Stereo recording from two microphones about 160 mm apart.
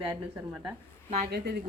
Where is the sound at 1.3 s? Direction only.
80° right.